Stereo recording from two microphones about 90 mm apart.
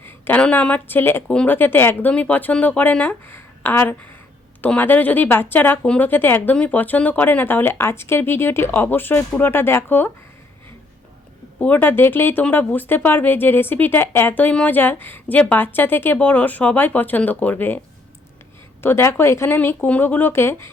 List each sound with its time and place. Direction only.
0.0 s a woman's voice: 15° left (ahead or behind)
5.8 s speech: 10° left (ahead or behind)
6.1 s speech: 25° left (ahead or behind)
11.6 s speech: 20° left (ahead or behind)
18.8 s speech: 25° left (ahead or behind)